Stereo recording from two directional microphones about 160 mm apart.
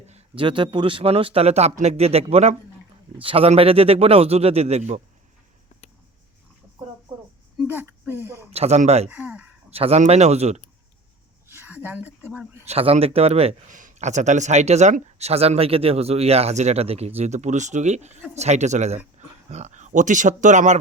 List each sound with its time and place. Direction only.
0.1 s speech: 35° right (ahead or behind)
7.7 s speech: 15° right (ahead or behind)
8.5 s speech: 45° right (ahead or behind)
9.0 s speech: 10° right (ahead or behind)
9.6 s speech: 40° right (ahead or behind)
11.4 s a sound: 15° right (ahead or behind)
12.6 s speech: 40° right (ahead or behind)